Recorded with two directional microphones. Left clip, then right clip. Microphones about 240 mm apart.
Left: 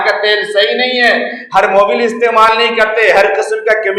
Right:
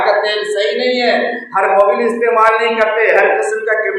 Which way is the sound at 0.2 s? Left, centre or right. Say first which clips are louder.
Left 4 dB; left.